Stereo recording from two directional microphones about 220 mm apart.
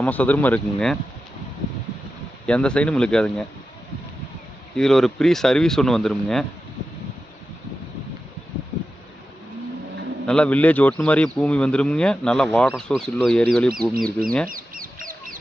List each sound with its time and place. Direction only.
0.0 s speech: 5° left (ahead or behind)
2.5 s speech: 5° left (ahead or behind)
4.8 s speech: centre (ahead or behind)
10.2 s speech: 5° left (ahead or behind)
13.9 s speech: 40° right (ahead or behind)
14.5 s chicken: 40° right (ahead or behind)